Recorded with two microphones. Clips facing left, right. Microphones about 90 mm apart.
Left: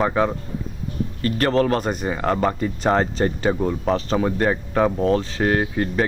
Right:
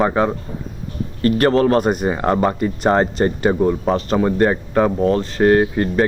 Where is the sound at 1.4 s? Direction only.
40° right (ahead or behind).